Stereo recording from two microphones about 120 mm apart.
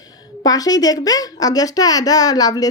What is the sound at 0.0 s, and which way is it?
A woman's voice, 30° left (ahead or behind).